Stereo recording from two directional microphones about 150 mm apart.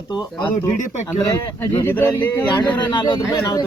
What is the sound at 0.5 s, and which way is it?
Speech, 60° left (ahead or behind).